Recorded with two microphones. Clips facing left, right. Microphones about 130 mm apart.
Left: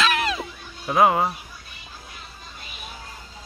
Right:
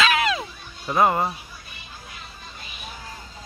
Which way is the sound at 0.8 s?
5° left (ahead or behind).